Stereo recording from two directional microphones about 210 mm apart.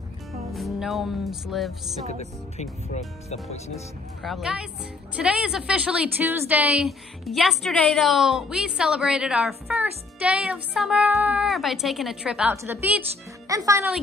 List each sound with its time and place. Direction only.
0.5 s music: centre (ahead or behind)
2.0 s speech: 30° left (ahead or behind)
4.2 s a woman's voice: centre (ahead or behind)